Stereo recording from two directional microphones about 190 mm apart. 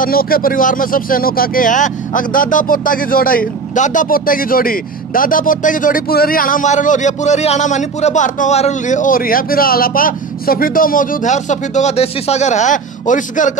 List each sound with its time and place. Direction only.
0.0 s speech: 50° left (ahead or behind)